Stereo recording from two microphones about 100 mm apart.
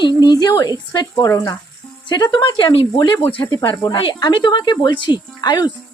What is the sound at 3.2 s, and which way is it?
Speech, 20° left (ahead or behind).